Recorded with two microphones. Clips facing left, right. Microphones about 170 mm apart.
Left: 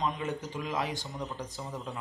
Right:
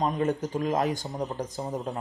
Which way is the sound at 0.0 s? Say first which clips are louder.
Right 7 dB; 45° right (ahead or behind).